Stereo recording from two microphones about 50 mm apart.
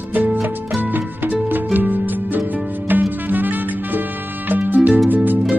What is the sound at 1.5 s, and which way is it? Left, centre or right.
Music, right.